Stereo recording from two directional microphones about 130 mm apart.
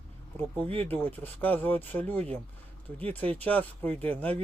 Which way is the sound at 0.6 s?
45° right (ahead or behind).